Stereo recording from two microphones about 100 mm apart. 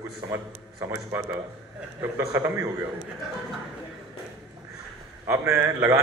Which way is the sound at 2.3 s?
25° right (ahead or behind).